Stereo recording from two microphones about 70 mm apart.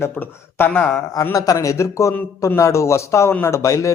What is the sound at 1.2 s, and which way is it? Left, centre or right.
Speech, left.